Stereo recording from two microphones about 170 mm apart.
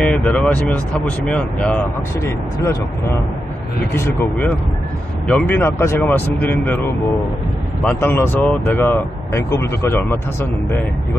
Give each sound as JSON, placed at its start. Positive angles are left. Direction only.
{"t": 0.0, "sound": "speech", "side_deg": 5}